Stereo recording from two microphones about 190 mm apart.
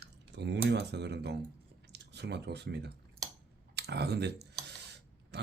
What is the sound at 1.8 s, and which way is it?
Speech, 60° right (ahead or behind).